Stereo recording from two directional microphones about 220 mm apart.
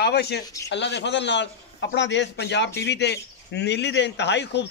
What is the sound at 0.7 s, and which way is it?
A man's voice, 55° left (ahead or behind).